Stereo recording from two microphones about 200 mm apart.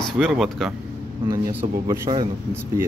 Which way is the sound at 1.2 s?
20° right (ahead or behind).